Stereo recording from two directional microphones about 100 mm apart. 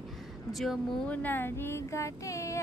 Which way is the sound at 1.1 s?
15° left (ahead or behind).